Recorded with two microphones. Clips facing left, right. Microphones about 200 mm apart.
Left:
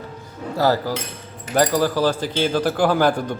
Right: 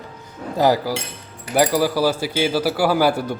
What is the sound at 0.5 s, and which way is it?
Speech, 15° right (ahead or behind).